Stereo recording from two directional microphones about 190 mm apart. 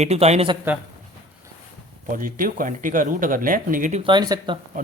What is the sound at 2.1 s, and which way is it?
Speech, 45° right (ahead or behind).